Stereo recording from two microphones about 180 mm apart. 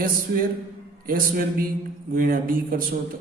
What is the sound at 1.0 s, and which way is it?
A man's voice, 50° right (ahead or behind).